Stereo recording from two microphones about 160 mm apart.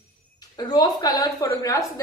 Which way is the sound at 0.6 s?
25° left (ahead or behind).